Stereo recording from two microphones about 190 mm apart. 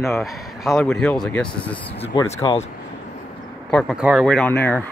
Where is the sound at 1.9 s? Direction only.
30° left (ahead or behind).